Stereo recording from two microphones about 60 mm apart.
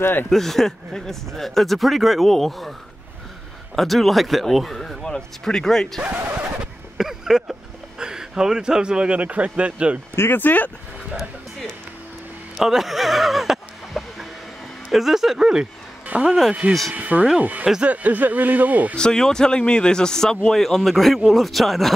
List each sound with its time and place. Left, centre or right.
0.0 s speech: left
0.3 s speech: centre
3.7 s speech: centre
6.0 s vehicle: right
7.0 s a sound: centre
8.0 s speech: centre
10.1 s speech: left
12.5 s music: centre
14.9 s speech: centre
16.1 s speech: right
18.9 s speech: centre